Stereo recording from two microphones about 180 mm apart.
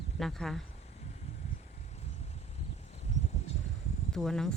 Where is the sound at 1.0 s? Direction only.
40° left (ahead or behind).